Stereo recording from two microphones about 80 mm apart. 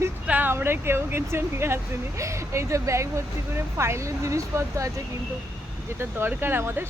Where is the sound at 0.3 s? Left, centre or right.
Right.